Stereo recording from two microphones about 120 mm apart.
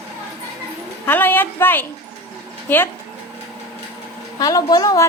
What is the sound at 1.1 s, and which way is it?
A woman's voice, 15° left (ahead or behind).